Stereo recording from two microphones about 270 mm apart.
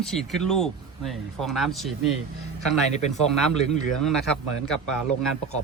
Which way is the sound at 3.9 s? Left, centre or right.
Centre.